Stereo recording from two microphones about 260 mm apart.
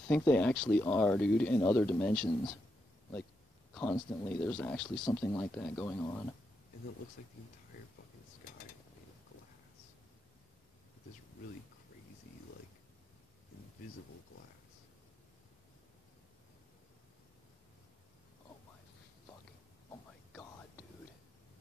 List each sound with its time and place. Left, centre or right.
0.1 s speech: centre
3.7 s speech: centre
7.2 s speech: left